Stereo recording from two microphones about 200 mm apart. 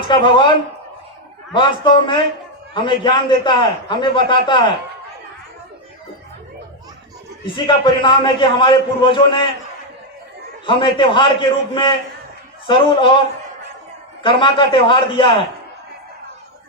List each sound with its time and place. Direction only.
0.1 s a man's voice: 25° left (ahead or behind)
1.5 s a man's voice: 25° left (ahead or behind)
7.4 s a man's voice: 25° left (ahead or behind)
10.7 s a man's voice: 25° left (ahead or behind)
14.2 s a man's voice: 25° left (ahead or behind)